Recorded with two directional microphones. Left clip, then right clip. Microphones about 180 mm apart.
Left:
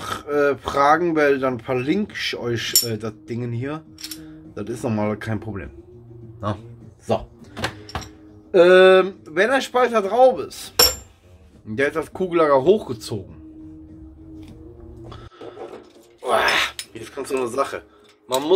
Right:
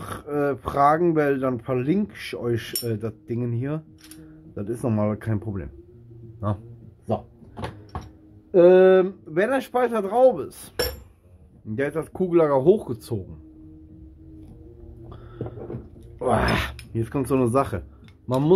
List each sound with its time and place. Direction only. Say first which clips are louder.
0.0 s speech: left 6 dB; 25° right (ahead or behind)
8.5 s speech: left 3 dB; 20° right (ahead or behind)
11.7 s speech: left 5 dB; 25° right (ahead or behind)
16.3 s speech: left 4 dB; 25° right (ahead or behind)